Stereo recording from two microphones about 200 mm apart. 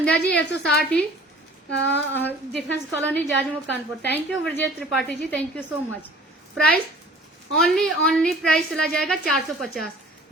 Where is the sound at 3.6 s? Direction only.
60° left (ahead or behind).